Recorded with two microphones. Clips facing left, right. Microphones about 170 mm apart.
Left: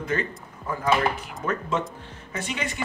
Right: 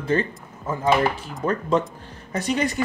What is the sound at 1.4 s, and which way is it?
Speech, 35° right (ahead or behind).